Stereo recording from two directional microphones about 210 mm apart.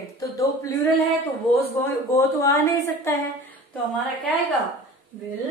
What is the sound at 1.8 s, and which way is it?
Speech, 15° left (ahead or behind).